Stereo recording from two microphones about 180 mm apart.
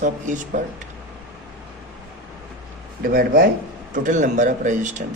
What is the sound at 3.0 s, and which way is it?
Speech, 50° right (ahead or behind).